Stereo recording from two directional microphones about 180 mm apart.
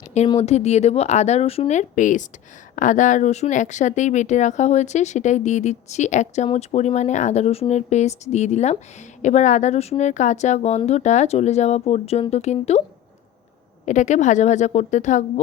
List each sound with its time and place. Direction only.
0.3 s speech: 35° left (ahead or behind)
13.8 s speech: 40° left (ahead or behind)